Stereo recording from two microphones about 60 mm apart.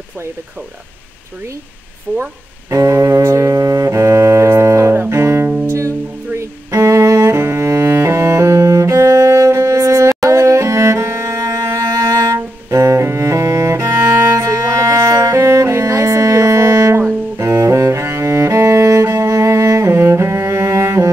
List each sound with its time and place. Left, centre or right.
2.1 s speech: right
2.7 s double bass: right
5.7 s music: right
12.4 s cello: right